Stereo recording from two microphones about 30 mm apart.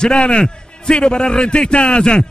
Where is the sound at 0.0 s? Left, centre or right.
Left.